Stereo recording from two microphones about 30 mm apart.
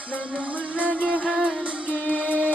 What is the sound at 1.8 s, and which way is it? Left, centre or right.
Music, left.